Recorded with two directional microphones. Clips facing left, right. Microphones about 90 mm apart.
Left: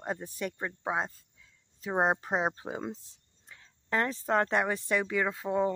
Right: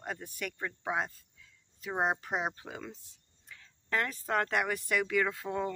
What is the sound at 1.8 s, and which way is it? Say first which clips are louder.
Speech: left 4 dB; 35° left (ahead or behind).